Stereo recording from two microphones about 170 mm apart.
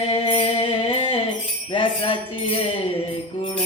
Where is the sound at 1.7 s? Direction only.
25° left (ahead or behind).